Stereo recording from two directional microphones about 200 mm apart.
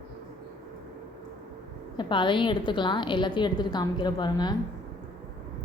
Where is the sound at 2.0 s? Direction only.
25° left (ahead or behind).